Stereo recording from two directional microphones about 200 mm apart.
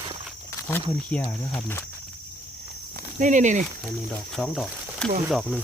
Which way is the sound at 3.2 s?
40° right (ahead or behind).